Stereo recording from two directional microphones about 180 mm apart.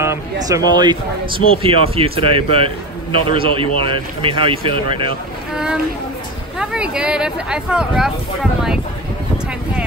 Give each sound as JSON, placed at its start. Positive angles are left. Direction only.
{"t": 0.0, "sound": "a man's voice", "side_deg": -15}
{"t": 5.5, "sound": "a sound", "side_deg": -5}
{"t": 6.6, "sound": "speech", "side_deg": -5}